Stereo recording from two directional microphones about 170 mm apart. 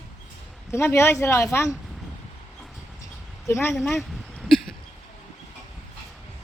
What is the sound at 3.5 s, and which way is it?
Speech, 15° left (ahead or behind).